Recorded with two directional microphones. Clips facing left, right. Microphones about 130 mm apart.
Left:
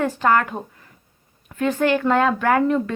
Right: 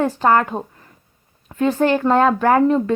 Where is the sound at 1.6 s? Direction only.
35° right (ahead or behind).